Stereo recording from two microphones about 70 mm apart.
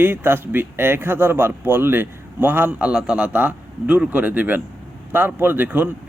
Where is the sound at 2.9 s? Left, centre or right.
Centre.